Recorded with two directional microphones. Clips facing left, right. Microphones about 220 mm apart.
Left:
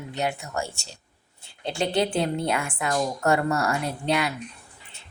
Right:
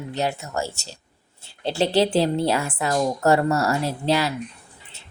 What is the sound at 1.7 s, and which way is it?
Speech, 35° right (ahead or behind).